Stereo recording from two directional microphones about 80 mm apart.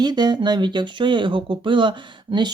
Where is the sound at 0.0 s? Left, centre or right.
Right.